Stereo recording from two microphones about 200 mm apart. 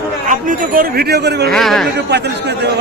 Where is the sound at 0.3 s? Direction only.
40° right (ahead or behind).